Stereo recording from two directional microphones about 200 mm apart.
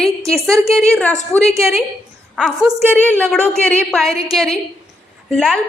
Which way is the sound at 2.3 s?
5° right (ahead or behind).